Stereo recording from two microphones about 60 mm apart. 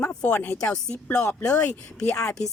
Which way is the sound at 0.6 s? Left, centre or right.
Centre.